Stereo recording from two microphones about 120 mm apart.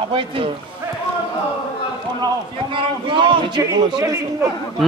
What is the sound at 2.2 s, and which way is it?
A man's voice, 45° right (ahead or behind).